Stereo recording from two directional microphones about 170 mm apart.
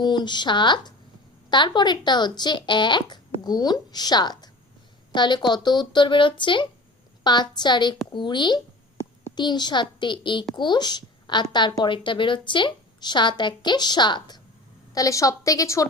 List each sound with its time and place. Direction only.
0.0 s a woman's voice: 25° left (ahead or behind)